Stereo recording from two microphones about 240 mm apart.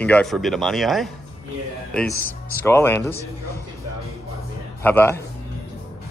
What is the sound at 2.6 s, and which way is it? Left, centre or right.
Speech, centre.